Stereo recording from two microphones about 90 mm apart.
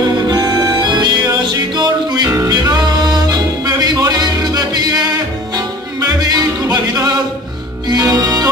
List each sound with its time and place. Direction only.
0.3 s music: 50° right (ahead or behind)
5.9 s music: 45° right (ahead or behind)